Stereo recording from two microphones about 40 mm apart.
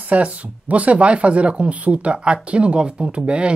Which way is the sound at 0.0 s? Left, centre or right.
Right.